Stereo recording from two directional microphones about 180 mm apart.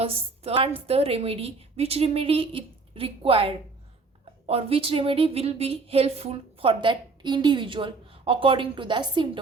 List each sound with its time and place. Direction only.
0.0 s a woman's voice: 30° right (ahead or behind)